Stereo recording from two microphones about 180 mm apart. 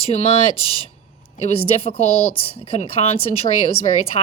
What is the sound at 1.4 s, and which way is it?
A woman's voice, 35° left (ahead or behind).